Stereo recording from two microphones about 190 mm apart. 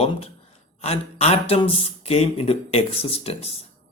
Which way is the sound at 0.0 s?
30° left (ahead or behind).